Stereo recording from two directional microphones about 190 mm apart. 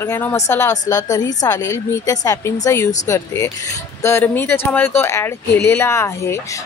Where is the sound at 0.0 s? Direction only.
10° left (ahead or behind).